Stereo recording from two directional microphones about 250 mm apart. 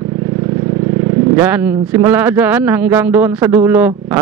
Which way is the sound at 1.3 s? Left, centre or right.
Centre.